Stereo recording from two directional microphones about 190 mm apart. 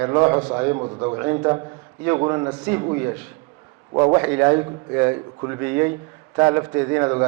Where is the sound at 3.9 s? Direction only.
20° right (ahead or behind).